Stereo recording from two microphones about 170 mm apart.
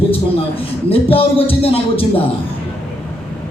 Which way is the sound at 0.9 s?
35° left (ahead or behind).